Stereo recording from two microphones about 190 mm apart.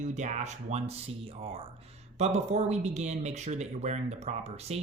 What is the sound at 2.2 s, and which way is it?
Speech, 35° right (ahead or behind).